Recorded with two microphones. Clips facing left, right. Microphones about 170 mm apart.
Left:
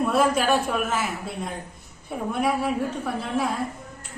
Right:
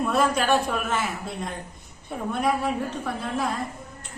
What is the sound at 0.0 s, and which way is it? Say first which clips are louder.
A man's voice: left 2 dB; 5° left (ahead or behind).